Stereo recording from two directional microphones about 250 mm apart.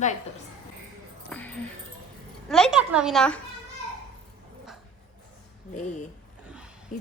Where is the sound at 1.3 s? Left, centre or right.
Centre.